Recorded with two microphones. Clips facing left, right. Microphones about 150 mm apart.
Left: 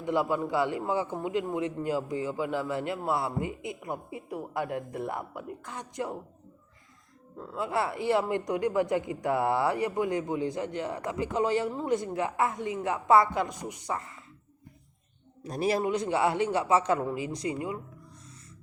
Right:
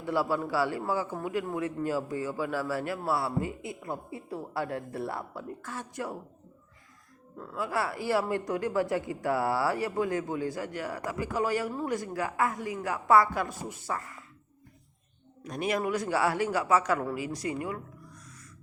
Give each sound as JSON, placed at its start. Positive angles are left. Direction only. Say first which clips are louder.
{"t": 0.0, "sound": "a woman's voice", "louder": "left 1 dB", "side_deg": 20}
{"t": 7.3, "sound": "a woman's voice", "louder": "left 1 dB", "side_deg": 25}
{"t": 15.4, "sound": "a woman's voice", "louder": "left 2 dB", "side_deg": 35}